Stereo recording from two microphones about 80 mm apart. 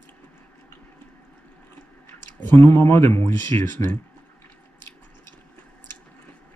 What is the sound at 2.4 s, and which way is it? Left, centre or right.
Speech, left.